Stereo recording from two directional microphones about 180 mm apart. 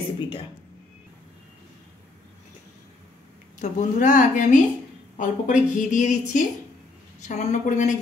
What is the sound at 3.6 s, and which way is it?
A woman's voice, 45° left (ahead or behind).